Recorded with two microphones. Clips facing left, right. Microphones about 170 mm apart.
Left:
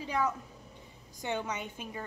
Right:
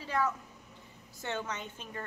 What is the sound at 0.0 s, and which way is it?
A woman's voice, 15° left (ahead or behind).